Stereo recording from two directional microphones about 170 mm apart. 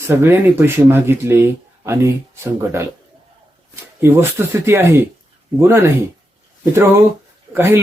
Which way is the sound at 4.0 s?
15° right (ahead or behind).